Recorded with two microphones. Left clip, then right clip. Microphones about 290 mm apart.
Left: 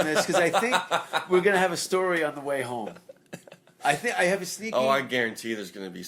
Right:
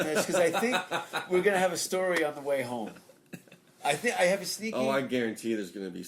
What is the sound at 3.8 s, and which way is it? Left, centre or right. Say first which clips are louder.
A man's voice: left 2 dB; left.